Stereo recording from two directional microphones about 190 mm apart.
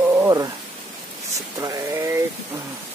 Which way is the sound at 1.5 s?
20° right (ahead or behind).